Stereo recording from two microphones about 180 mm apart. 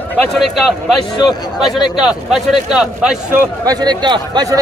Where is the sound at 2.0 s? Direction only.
5° right (ahead or behind).